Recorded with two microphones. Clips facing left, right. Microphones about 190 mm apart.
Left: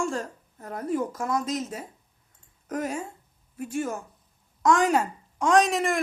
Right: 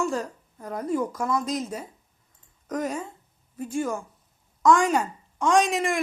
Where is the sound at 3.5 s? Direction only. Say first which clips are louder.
Right 1 dB; 25° right (ahead or behind).